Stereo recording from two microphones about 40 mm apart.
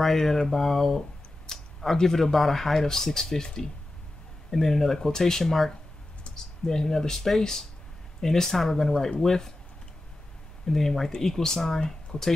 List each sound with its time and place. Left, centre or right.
0.0 s speech: centre
10.7 s speech: centre